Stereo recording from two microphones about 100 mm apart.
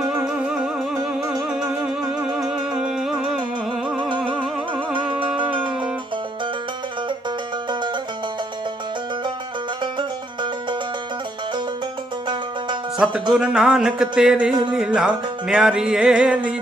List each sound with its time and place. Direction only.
0.0 s music: 10° right (ahead or behind)
9.9 s music: 50° right (ahead or behind)
12.3 s music: 50° right (ahead or behind)
13.3 s music: 5° right (ahead or behind)